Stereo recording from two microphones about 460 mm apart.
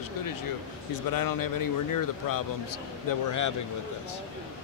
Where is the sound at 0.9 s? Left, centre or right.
Left.